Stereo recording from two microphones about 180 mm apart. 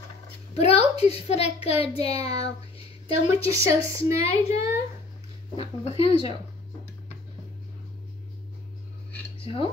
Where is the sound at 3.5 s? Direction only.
15° right (ahead or behind).